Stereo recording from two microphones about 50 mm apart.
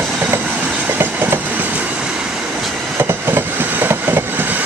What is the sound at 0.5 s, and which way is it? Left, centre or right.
Train, right.